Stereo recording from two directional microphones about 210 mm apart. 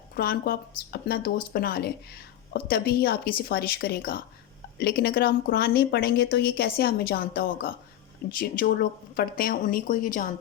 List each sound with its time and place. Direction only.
0.2 s a woman's voice: 45° left (ahead or behind)